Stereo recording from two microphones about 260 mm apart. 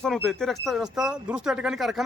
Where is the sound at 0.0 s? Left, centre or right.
Centre.